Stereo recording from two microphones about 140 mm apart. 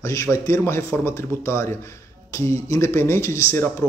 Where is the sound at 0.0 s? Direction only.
20° left (ahead or behind).